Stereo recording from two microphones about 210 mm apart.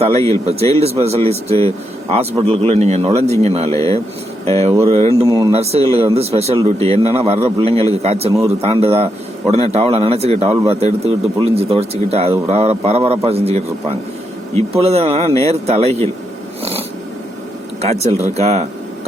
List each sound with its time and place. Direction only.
0.0 s a man's voice: 30° right (ahead or behind)
3.7 s speech: 15° left (ahead or behind)
4.9 s speech: 30° right (ahead or behind)
5.2 s speech: 15° right (ahead or behind)
5.5 s a man's voice: 30° right (ahead or behind)
17.7 s speech: 30° right (ahead or behind)